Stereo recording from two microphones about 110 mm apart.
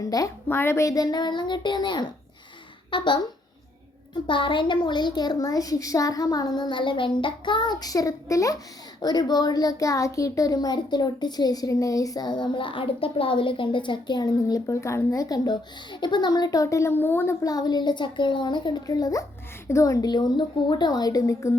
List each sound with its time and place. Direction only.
0.0 s a child's voice: 30° left (ahead or behind)
0.4 s a child's voice: 20° left (ahead or behind); by 3.2 s 45° left (ahead or behind)
4.3 s a child's voice: 50° left (ahead or behind); by 17.3 s 20° left (ahead or behind)
17.4 s a child's voice: 35° left (ahead or behind)